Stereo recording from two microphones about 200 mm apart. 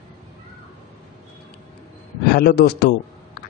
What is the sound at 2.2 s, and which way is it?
Speech, 55° left (ahead or behind).